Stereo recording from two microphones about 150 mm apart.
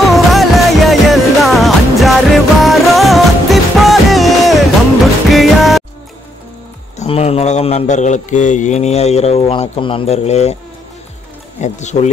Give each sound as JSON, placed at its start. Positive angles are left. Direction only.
{"t": 0.0, "sound": "music", "side_deg": 0}
{"t": 7.0, "sound": "speech", "side_deg": 45}
{"t": 11.6, "sound": "speech", "side_deg": 50}